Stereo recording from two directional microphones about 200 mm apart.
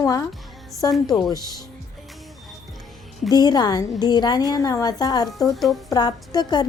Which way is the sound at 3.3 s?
20° left (ahead or behind).